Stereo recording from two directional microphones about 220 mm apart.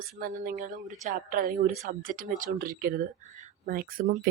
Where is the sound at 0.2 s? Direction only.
40° right (ahead or behind).